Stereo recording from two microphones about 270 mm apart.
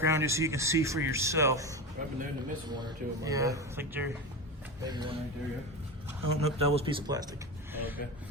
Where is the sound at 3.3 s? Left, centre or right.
Centre.